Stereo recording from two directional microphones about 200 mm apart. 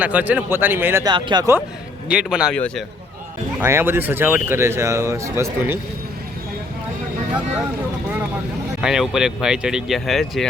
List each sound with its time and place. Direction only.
0.0 s speech: 5° right (ahead or behind)
1.1 s speech: 25° right (ahead or behind)
2.0 s speech: 5° right (ahead or behind)
3.6 s speech: 10° right (ahead or behind)
8.8 s speech: 5° right (ahead or behind)